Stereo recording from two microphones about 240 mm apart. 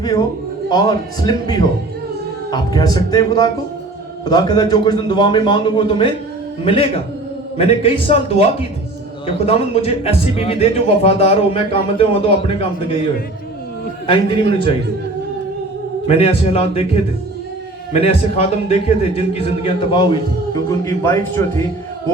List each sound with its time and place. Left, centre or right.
0.0 s a man's voice: centre
16.0 s a man's voice: left